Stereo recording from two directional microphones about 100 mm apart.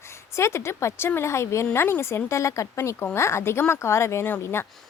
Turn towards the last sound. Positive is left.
turn(degrees=25)  # may be behind; listen again after turning